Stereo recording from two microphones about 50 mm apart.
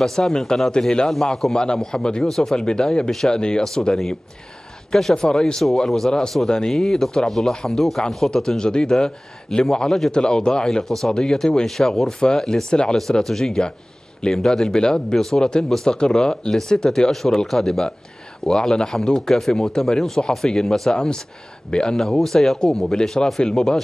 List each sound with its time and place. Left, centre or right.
0.0 s speech: centre
20.9 s speech: centre
21.9 s speech: centre